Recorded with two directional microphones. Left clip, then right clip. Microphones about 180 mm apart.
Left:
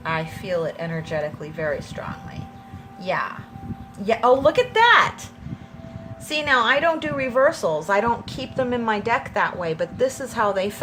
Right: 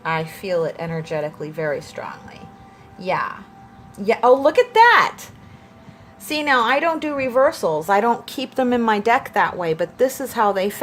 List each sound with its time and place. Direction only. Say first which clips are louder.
0.0 s a woman's voice: right 3 dB; 35° right (ahead or behind)
6.2 s a woman's voice: right 1 dB; 30° right (ahead or behind)